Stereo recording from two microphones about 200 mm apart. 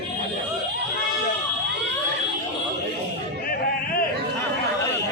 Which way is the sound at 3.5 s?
45° left (ahead or behind).